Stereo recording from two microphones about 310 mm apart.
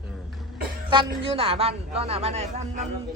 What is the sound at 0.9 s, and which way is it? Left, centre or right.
A man's voice, centre.